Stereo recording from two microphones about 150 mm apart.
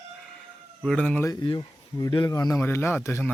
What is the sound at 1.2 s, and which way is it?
Speech, 25° left (ahead or behind).